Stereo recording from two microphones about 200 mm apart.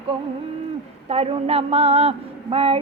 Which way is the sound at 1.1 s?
30° right (ahead or behind).